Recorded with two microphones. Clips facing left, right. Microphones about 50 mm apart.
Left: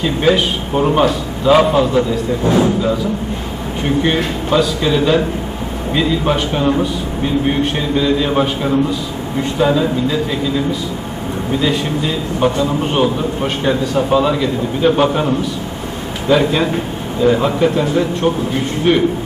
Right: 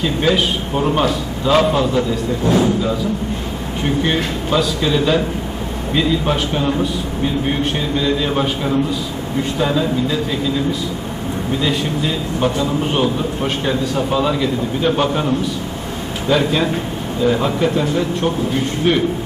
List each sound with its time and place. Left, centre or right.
0.0 s a man's voice: centre